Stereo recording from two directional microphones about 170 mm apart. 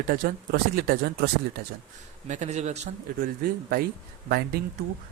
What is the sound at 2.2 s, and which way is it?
Speech, 45° right (ahead or behind).